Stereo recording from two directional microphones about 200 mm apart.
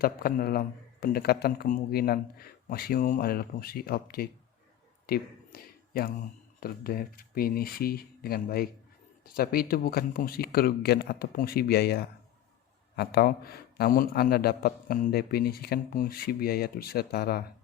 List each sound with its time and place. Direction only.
0.0 s a man's voice: 45° left (ahead or behind)
5.0 s a sound: 50° left (ahead or behind)
6.6 s a man's voice: 50° left (ahead or behind)